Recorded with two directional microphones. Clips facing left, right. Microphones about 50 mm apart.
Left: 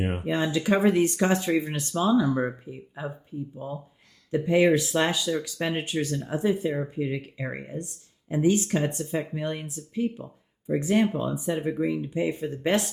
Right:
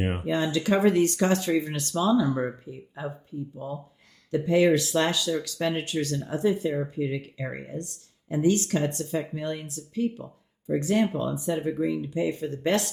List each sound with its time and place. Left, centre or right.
0.3 s speech: centre
3.6 s speech: left